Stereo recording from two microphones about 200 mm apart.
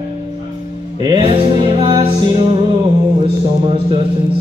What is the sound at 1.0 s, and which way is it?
Music, 25° right (ahead or behind).